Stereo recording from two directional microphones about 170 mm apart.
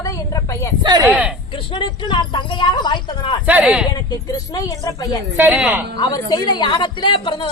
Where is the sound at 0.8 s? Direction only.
25° right (ahead or behind).